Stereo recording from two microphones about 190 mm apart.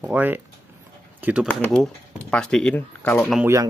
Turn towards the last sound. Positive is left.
turn(degrees=-15)  # may be behind; listen again after turning